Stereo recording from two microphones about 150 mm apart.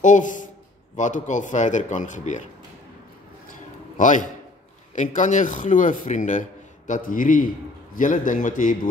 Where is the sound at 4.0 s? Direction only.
60° left (ahead or behind).